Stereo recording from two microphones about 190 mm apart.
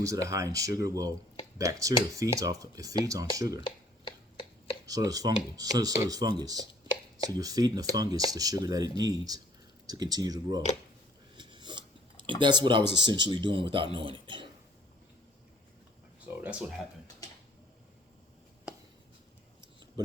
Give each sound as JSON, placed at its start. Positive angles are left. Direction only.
{"t": 0.0, "sound": "speech", "side_deg": -15}
{"t": 4.9, "sound": "speech", "side_deg": -20}
{"t": 11.3, "sound": "a sound", "side_deg": -25}
{"t": 13.0, "sound": "speech", "side_deg": -25}
{"t": 16.4, "sound": "speech", "side_deg": -5}